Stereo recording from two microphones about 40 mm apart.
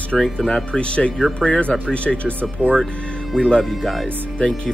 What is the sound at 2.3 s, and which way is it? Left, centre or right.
Speech, right.